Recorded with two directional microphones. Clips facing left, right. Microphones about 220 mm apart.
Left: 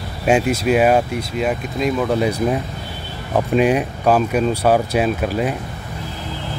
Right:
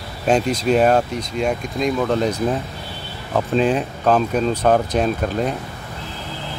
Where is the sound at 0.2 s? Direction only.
5° left (ahead or behind).